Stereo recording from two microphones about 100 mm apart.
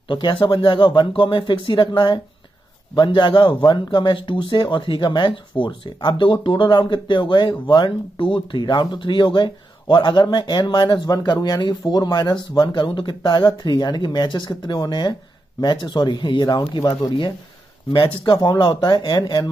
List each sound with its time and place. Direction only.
0.1 s speech: 50° left (ahead or behind)
17.9 s speech: 60° left (ahead or behind); by 19.5 s 45° left (ahead or behind)